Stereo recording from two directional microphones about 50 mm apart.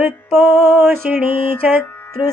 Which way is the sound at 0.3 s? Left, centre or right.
Right.